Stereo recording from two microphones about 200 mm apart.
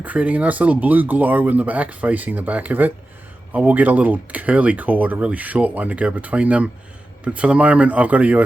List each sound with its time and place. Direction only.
0.0 s speech: 5° right (ahead or behind)